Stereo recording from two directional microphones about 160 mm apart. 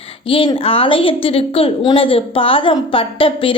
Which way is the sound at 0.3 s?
35° left (ahead or behind).